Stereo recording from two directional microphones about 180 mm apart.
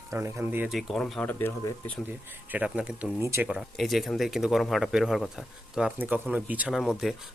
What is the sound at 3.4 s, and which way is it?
Speech, centre (ahead or behind).